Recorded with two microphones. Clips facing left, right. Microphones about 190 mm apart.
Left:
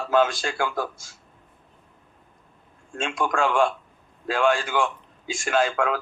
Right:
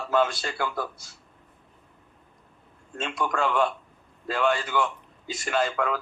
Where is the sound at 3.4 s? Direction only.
90° left.